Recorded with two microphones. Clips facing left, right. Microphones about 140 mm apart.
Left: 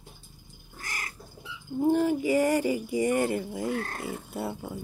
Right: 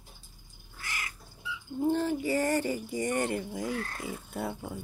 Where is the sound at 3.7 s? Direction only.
50° left (ahead or behind).